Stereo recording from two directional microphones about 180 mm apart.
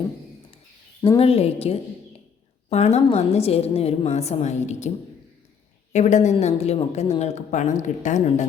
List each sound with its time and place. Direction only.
1.0 s a woman's voice: 30° left (ahead or behind)
5.9 s a woman's voice: 40° left (ahead or behind)